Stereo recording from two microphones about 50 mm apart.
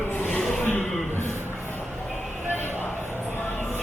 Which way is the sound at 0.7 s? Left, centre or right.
Left.